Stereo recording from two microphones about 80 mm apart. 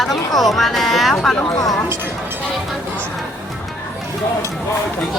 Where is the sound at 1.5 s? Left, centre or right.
Left.